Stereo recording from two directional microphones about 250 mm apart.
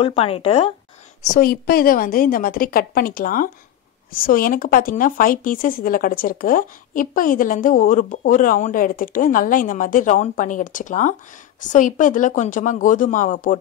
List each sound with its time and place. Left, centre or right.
0.0 s speech: left
1.2 s speech: left